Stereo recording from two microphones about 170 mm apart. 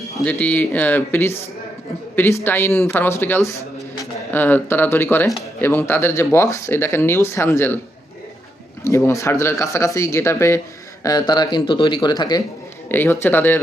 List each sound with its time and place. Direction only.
0.3 s a man's voice: 10° left (ahead or behind)
8.8 s speech: 15° left (ahead or behind)
12.9 s speech: 10° left (ahead or behind)